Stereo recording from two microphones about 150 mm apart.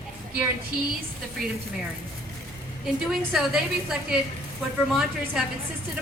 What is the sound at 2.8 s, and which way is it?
A woman's voice, centre (ahead or behind).